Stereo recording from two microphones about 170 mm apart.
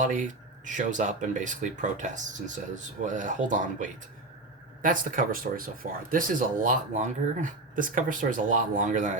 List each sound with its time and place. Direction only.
0.0 s speech: 50° right (ahead or behind)